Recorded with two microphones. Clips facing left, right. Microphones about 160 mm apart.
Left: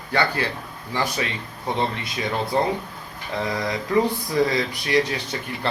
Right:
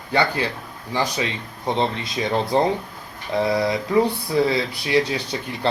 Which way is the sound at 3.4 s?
10° right (ahead or behind).